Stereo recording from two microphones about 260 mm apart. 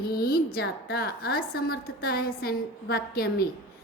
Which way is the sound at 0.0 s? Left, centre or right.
Left.